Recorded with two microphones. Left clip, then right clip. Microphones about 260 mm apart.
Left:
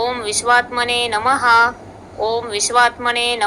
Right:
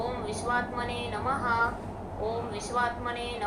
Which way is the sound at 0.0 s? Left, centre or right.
Left.